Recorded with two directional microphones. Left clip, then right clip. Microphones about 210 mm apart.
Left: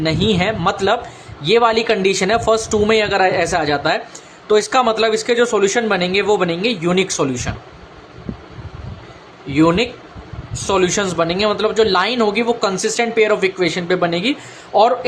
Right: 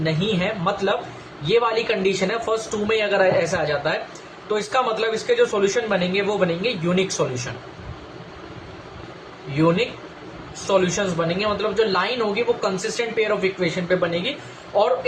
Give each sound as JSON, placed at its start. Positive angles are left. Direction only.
{"t": 0.0, "sound": "speech", "side_deg": 55}
{"t": 9.6, "sound": "speech", "side_deg": 55}